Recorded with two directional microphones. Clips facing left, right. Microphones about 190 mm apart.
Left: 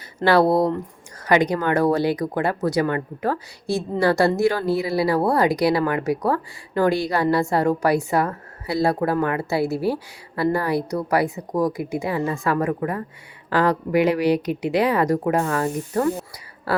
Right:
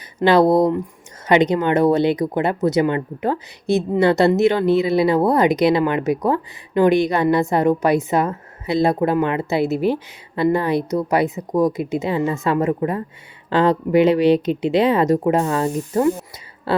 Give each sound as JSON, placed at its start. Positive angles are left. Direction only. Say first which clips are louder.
{"t": 0.2, "sound": "speech", "louder": "right 3 dB", "side_deg": -20}